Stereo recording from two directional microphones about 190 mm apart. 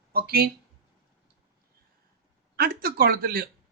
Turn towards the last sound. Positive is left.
turn(degrees=-50)  # may be behind; listen again after turning